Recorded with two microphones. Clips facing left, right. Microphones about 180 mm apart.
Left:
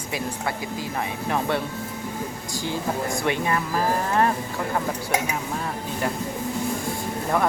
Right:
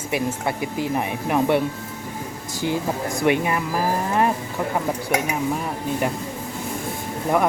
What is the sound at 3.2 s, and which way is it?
Speech, 15° right (ahead or behind).